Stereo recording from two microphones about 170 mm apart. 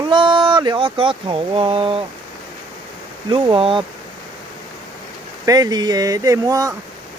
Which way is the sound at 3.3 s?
30° right (ahead or behind).